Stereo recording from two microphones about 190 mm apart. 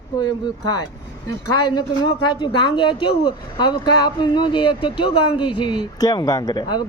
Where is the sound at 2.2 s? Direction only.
25° left (ahead or behind).